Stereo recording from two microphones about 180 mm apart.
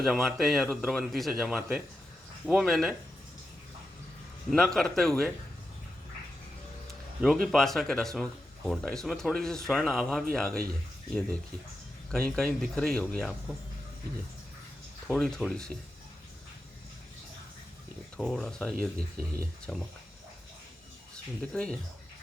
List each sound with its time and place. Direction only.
0.0 s speech: centre (ahead or behind)
4.4 s speech: centre (ahead or behind)
7.4 s speech: centre (ahead or behind)
15.0 s speech: 5° left (ahead or behind)
18.2 s speech: centre (ahead or behind)
21.4 s speech: 5° left (ahead or behind)